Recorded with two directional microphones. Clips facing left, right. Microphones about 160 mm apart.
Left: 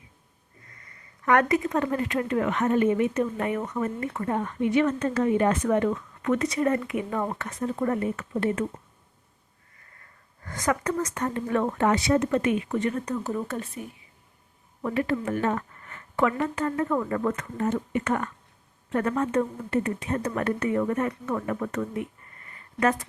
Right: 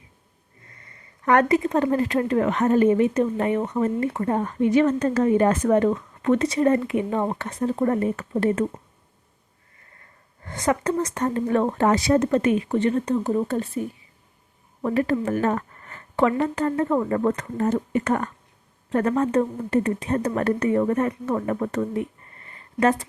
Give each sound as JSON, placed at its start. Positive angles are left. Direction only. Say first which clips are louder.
{"t": 0.8, "sound": "speech", "louder": "right 2 dB", "side_deg": -30}
{"t": 10.4, "sound": "speech", "louder": "right 4 dB", "side_deg": -25}